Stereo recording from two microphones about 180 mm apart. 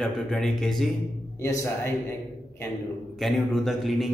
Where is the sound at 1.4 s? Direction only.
15° left (ahead or behind).